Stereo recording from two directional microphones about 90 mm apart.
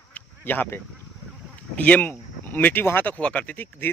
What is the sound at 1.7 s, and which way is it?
Speech, 15° left (ahead or behind).